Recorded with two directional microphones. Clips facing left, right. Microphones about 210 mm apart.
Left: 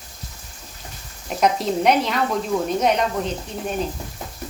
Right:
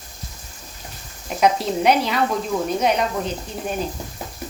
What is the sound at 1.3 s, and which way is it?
Speech, centre (ahead or behind).